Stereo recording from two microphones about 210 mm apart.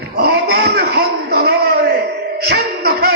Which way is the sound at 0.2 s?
50° right (ahead or behind).